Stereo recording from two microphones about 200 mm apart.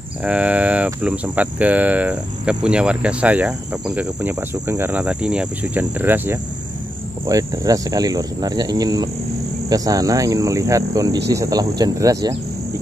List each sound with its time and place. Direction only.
0.2 s speech: 5° right (ahead or behind)